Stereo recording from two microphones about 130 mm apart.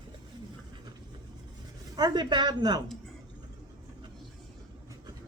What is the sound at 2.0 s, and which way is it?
Speech, 35° right (ahead or behind).